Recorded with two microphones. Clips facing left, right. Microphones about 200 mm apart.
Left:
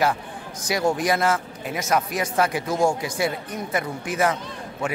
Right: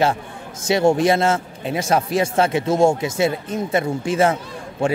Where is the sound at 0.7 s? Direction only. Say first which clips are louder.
Right 6 dB; 25° right (ahead or behind).